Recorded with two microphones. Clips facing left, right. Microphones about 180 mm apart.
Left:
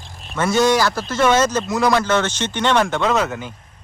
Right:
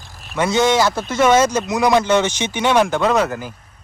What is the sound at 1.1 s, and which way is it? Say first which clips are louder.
A man's voice: right 2 dB; 10° right (ahead or behind).